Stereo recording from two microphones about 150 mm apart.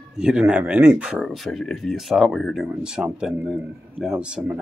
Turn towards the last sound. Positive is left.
turn(degrees=-5)  # may be behind; listen again after turning